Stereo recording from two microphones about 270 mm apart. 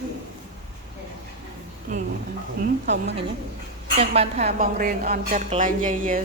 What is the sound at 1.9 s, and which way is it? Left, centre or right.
Speech, right.